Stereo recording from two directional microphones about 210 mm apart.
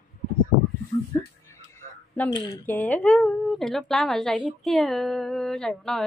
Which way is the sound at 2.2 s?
20° left (ahead or behind).